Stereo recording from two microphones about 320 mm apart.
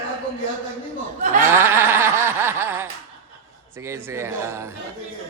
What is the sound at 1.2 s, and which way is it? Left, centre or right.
Speech, right.